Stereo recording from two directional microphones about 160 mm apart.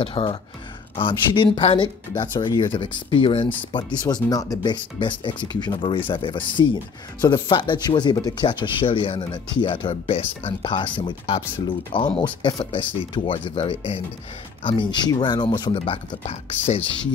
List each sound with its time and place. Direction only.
0.0 s speech: 35° left (ahead or behind)